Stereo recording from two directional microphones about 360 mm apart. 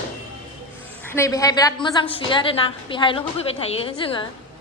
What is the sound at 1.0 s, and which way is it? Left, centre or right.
A woman's voice, centre.